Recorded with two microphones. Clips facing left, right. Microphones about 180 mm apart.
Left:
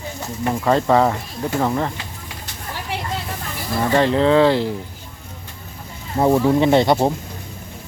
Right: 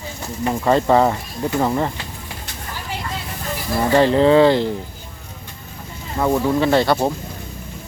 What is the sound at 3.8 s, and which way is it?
Speech, centre (ahead or behind).